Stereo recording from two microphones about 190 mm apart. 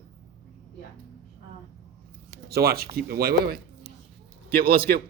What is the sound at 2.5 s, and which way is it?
Speech, 55° right (ahead or behind).